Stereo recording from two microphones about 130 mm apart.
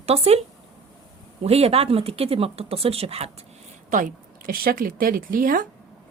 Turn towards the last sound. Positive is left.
turn(degrees=-90)